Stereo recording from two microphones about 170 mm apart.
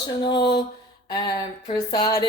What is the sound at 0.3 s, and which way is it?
Speech, 25° left (ahead or behind).